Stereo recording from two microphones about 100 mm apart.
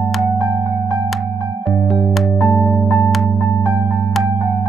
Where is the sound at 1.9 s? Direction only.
Centre (ahead or behind).